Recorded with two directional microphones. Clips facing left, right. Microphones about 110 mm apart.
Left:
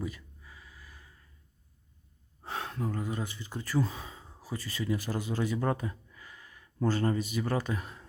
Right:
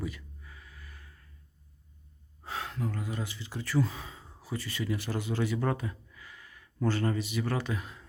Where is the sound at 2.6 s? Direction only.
25° left (ahead or behind).